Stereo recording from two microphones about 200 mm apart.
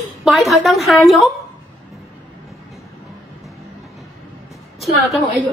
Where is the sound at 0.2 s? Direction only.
Centre (ahead or behind).